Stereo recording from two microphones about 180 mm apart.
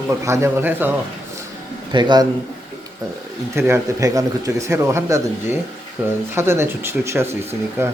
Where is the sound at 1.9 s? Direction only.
25° right (ahead or behind).